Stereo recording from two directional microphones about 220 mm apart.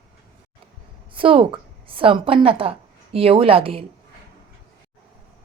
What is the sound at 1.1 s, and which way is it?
A woman's voice, 25° right (ahead or behind).